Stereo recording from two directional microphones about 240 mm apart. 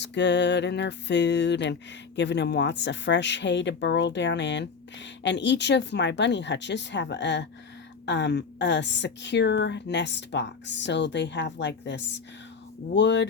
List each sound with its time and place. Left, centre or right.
0.0 s speech: left